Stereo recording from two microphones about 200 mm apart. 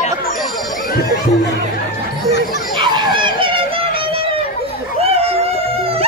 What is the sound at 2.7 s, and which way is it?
Dog, 25° right (ahead or behind).